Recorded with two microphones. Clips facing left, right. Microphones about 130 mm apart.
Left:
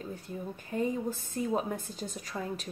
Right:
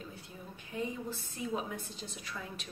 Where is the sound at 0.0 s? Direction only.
45° left (ahead or behind).